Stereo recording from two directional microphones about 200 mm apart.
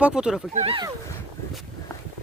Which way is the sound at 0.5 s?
30° right (ahead or behind).